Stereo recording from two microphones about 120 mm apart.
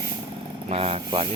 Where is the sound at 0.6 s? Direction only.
55° right (ahead or behind).